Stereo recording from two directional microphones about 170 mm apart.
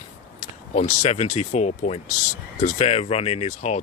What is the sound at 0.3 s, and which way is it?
Speech, 45° left (ahead or behind).